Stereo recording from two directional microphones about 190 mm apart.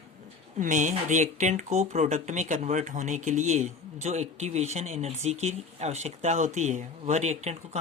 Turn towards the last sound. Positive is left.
turn(degrees=-35)  # may be behind; listen again after turning